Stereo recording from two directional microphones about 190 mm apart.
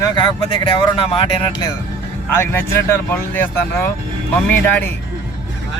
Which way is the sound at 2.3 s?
10° left (ahead or behind).